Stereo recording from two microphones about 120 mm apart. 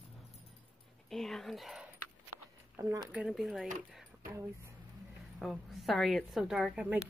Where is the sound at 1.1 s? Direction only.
Centre (ahead or behind).